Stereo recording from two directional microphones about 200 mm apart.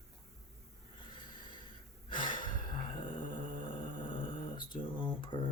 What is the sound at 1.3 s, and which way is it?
Snort, 20° left (ahead or behind).